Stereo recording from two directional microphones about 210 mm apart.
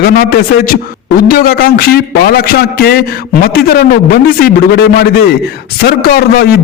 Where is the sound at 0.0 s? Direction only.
45° left (ahead or behind).